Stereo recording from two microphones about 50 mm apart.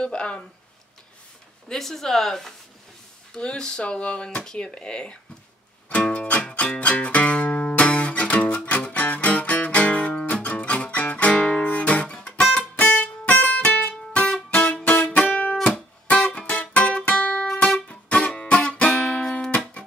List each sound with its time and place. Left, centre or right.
0.0 s speech: centre
1.7 s speech: centre
3.3 s speech: centre
5.9 s music: left
12.7 s music: left
14.5 s music: centre